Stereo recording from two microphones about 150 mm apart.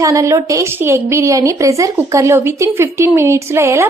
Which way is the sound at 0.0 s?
20° right (ahead or behind).